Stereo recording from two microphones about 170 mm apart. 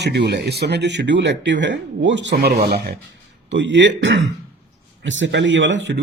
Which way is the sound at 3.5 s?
90° right.